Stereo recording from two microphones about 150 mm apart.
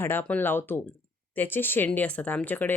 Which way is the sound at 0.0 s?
15° left (ahead or behind).